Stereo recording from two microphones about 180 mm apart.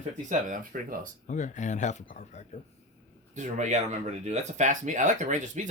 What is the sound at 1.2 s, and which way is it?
Speech, 45° left (ahead or behind).